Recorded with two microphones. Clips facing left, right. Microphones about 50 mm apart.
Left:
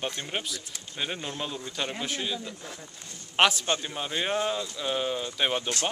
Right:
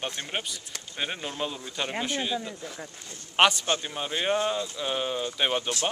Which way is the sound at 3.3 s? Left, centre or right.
Centre.